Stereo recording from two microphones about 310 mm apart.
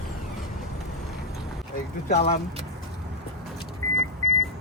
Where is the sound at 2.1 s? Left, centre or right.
Centre.